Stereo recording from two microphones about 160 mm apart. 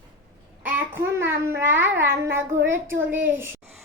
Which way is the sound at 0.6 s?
15° right (ahead or behind).